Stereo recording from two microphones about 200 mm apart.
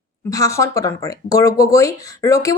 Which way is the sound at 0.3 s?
15° left (ahead or behind).